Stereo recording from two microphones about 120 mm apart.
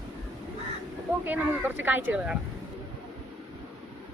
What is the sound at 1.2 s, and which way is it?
Speech, 15° right (ahead or behind).